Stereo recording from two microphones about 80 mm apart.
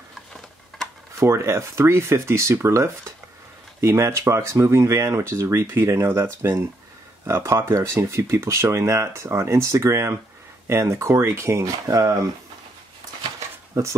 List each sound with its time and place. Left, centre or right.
1.2 s speech: right
13.7 s speech: right